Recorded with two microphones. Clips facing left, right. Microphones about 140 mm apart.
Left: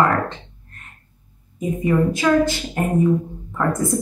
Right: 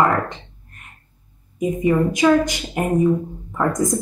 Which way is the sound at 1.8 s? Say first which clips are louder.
Right 2 dB; 15° right (ahead or behind).